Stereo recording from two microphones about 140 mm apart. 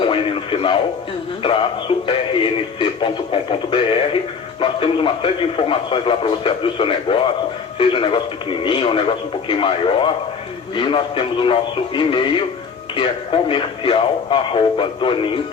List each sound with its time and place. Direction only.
0.0 s radio: 40° left (ahead or behind)
2.0 s a man's voice: 35° left (ahead or behind)